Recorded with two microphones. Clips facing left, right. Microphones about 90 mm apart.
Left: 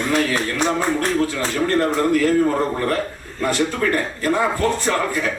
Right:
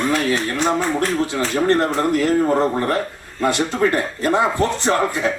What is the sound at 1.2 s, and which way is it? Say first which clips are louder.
Speech: right 2 dB; 20° right (ahead or behind).